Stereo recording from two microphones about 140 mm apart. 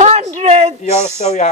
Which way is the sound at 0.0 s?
50° right (ahead or behind).